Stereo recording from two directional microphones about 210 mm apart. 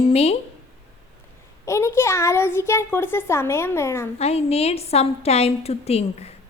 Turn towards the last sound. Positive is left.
turn(degrees=30)  # may be behind; listen again after turning